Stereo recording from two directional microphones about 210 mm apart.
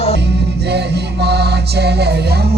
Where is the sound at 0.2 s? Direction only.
50° right (ahead or behind).